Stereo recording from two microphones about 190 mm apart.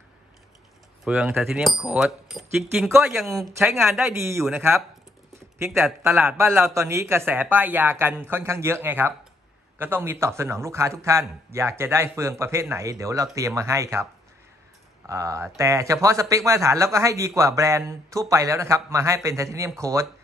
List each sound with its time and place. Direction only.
1.0 s speech: 5° right (ahead or behind)
4.3 s speech: 15° right (ahead or behind)
6.0 s speech: 15° right (ahead or behind)
15.0 s speech: 15° right (ahead or behind)